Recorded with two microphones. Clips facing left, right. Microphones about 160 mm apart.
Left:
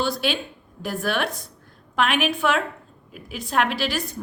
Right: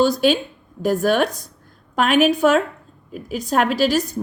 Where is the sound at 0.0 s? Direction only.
40° right (ahead or behind).